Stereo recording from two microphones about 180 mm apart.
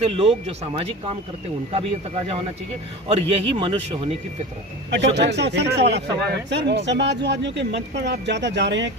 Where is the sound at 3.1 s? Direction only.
35° right (ahead or behind).